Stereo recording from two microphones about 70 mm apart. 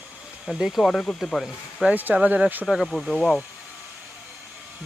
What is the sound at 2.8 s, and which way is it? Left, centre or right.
Speech, centre.